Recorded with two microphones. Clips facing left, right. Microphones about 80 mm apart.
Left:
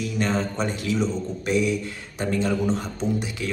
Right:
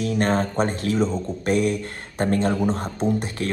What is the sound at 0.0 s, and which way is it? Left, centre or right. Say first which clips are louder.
Speech: right 3 dB; right.